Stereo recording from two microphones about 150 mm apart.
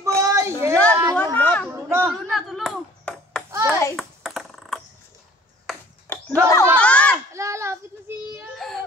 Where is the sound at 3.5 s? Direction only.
20° right (ahead or behind).